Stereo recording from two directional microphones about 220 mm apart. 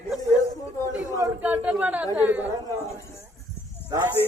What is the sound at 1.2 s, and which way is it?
A man's voice, 10° right (ahead or behind).